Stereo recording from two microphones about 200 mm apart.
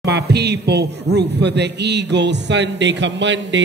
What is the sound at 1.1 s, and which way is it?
Speech, 55° right (ahead or behind).